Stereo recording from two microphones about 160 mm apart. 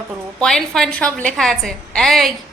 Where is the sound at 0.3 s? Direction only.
5° left (ahead or behind).